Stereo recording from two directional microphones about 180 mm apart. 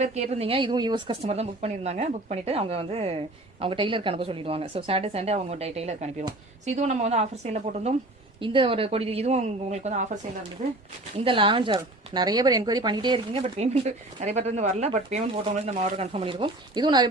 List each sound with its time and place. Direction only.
0.0 s speech: 40° right (ahead or behind)
11.2 s speech: 30° right (ahead or behind)